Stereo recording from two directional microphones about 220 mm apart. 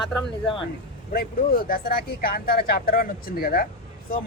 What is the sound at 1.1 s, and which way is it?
Speech, 40° left (ahead or behind).